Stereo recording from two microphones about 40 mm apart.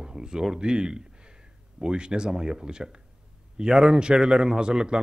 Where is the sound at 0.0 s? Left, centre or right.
Centre.